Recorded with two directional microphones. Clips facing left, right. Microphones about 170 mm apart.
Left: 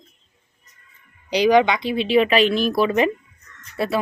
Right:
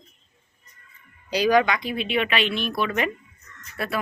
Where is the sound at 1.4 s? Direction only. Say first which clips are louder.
Left 4 dB; 25° left (ahead or behind).